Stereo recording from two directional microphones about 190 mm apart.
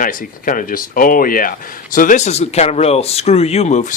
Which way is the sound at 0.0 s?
45° left (ahead or behind).